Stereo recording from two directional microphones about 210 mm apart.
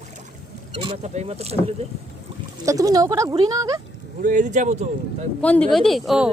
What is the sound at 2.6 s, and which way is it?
Speech, 15° right (ahead or behind).